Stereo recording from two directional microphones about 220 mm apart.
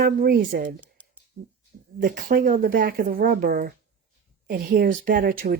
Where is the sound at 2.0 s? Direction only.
40° right (ahead or behind).